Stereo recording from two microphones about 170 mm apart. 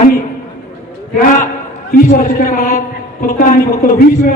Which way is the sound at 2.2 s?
55° left (ahead or behind).